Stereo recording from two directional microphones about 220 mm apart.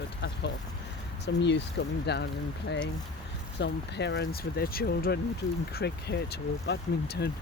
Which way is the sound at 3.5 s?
50° left (ahead or behind).